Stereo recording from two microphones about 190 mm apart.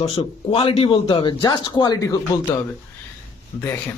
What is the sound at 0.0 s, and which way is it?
Speech, 30° left (ahead or behind).